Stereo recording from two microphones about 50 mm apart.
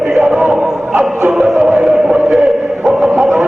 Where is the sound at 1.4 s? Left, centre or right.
Centre.